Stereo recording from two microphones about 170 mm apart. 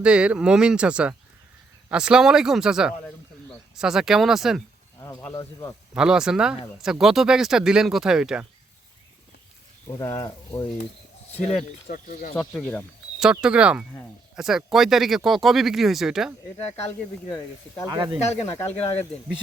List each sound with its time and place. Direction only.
0.0 s speech: 5° right (ahead or behind)
4.9 s speech: 20° left (ahead or behind)
6.0 s speech: 5° right (ahead or behind)
9.9 s speech: 20° left (ahead or behind)
11.9 s speech: 55° left (ahead or behind)
12.4 s speech: 5° left (ahead or behind)
17.2 s speech: 20° left (ahead or behind)
17.8 s speech: 25° right (ahead or behind)
18.7 s speech: 10° left (ahead or behind)